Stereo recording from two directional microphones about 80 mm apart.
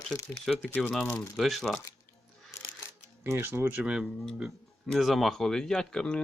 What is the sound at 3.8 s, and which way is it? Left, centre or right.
Speech, centre.